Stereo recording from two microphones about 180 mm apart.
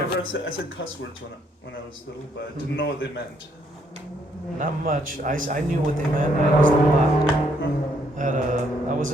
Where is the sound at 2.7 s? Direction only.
75° left (ahead or behind).